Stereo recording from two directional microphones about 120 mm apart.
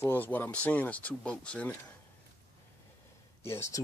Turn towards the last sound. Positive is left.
turn(degrees=20)  # may be behind; listen again after turning